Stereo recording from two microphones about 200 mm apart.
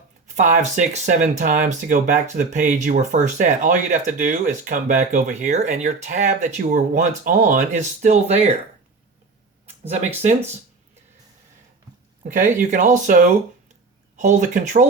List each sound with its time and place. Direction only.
0.3 s speech: 35° right (ahead or behind)
12.4 s speech: 40° right (ahead or behind)